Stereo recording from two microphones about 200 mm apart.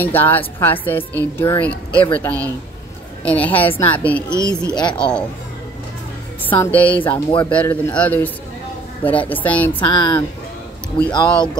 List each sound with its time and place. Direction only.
0.0 s speech: 10° left (ahead or behind)
4.4 s speech: 20° left (ahead or behind)
6.5 s speech: 10° left (ahead or behind)
9.3 s speech: 10° left (ahead or behind)
9.7 s speech: 25° left (ahead or behind)